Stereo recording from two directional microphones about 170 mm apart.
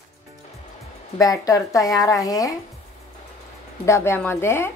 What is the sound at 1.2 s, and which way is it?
A woman's voice, 20° left (ahead or behind).